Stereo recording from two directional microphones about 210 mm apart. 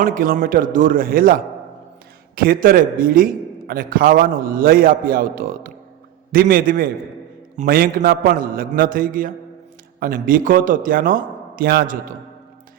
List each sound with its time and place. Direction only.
0.0 s a man's voice: 40° right (ahead or behind)